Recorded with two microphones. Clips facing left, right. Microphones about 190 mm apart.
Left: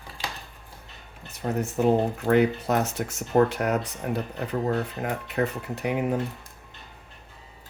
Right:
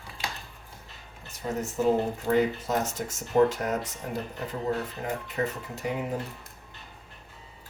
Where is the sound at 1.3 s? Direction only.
60° left (ahead or behind).